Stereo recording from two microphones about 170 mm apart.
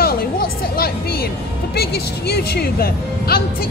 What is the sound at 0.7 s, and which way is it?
Speech, 65° left (ahead or behind).